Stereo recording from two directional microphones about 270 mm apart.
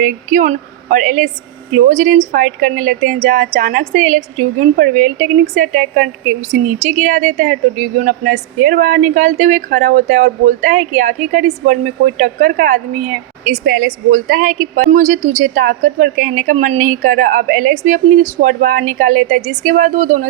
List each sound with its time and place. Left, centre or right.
0.0 s a woman's voice: right